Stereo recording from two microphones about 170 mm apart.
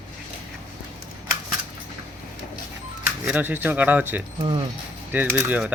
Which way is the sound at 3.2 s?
10° right (ahead or behind).